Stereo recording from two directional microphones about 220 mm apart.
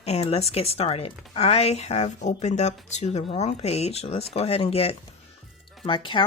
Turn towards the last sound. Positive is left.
turn(degrees=20)  # may be behind; listen again after turning